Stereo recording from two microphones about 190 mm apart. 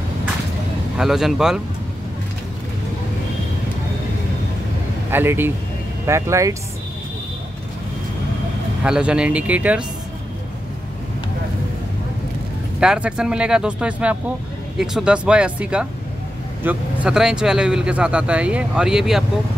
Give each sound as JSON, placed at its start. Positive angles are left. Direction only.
{"t": 0.9, "sound": "speech", "side_deg": 0}
{"t": 5.1, "sound": "speech", "side_deg": -10}
{"t": 8.8, "sound": "speech", "side_deg": -5}
{"t": 12.8, "sound": "speech", "side_deg": -5}